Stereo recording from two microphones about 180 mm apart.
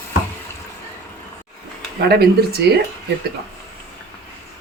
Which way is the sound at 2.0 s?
60° right (ahead or behind).